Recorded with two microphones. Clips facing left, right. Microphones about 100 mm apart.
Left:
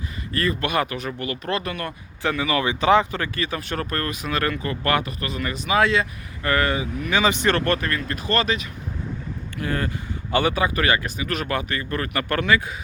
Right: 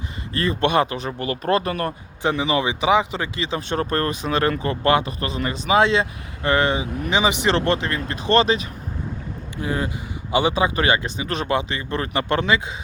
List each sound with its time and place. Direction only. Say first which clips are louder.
0.3 s speech: right 4 dB; 30° right (ahead or behind)
2.2 s speech: right 2 dB; 25° right (ahead or behind)
9.6 s speech: right 1 dB; 15° right (ahead or behind)